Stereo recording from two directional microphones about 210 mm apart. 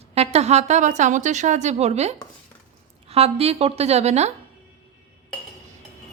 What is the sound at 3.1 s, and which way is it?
A woman's voice, 30° right (ahead or behind).